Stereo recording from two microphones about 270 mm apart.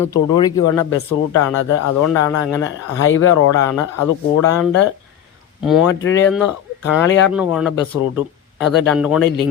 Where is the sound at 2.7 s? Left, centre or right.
Left.